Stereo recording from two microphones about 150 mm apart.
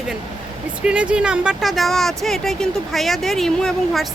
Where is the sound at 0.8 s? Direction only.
5° right (ahead or behind).